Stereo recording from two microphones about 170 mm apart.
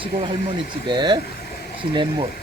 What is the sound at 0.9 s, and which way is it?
Speech, 25° right (ahead or behind).